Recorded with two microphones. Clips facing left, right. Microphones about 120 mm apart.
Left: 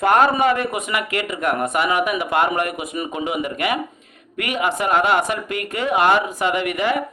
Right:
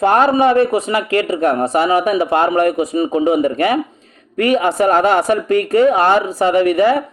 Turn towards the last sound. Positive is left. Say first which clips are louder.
# right 8 dB
turn(degrees=-35)  # may be behind; listen again after turning